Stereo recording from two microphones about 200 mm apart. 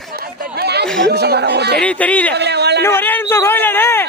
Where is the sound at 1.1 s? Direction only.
55° right (ahead or behind).